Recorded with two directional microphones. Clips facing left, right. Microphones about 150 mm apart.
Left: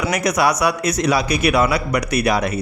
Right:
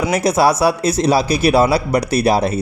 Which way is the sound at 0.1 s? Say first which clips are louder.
Right 4 dB; 30° right (ahead or behind).